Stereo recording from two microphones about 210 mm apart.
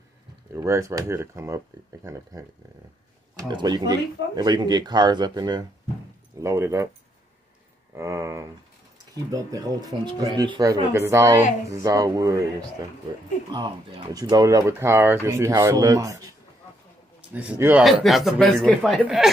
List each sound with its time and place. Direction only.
0.5 s speech: 15° right (ahead or behind)
7.9 s speech: 15° right (ahead or behind)